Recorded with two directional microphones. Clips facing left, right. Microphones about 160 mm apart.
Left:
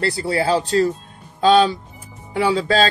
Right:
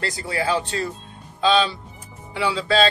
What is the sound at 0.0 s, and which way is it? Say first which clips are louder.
Speech: left 5 dB; 35° left (ahead or behind).